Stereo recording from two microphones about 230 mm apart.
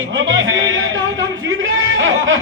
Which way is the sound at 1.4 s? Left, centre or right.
Right.